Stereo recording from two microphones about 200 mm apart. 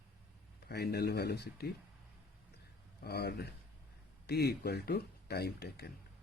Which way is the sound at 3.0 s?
55° left (ahead or behind).